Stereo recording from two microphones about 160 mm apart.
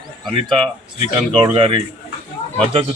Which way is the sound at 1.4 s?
30° right (ahead or behind).